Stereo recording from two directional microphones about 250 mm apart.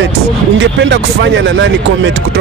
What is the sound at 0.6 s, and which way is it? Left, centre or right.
Speech, right.